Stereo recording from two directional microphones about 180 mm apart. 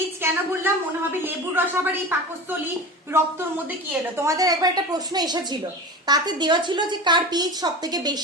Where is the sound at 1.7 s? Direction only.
10° right (ahead or behind).